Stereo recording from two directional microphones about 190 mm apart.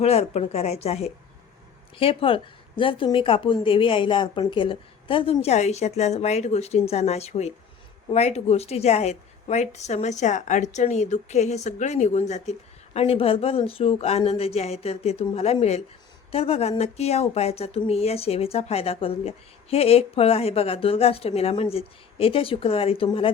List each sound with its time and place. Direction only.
0.0 s a woman's voice: 35° left (ahead or behind)